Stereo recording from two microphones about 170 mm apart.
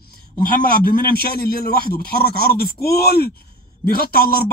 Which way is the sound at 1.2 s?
65° left (ahead or behind).